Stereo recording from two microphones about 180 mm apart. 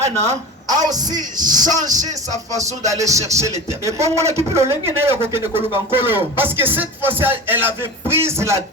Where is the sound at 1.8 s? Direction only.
45° right (ahead or behind).